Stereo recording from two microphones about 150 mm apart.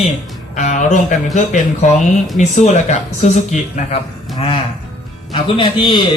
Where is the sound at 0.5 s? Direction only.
55° left (ahead or behind).